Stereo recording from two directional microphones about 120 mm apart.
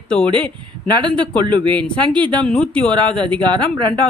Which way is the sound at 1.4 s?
40° right (ahead or behind).